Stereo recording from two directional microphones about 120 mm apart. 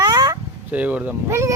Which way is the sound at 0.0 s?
30° right (ahead or behind).